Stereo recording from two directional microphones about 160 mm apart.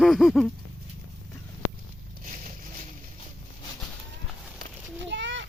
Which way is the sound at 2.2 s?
50° right (ahead or behind).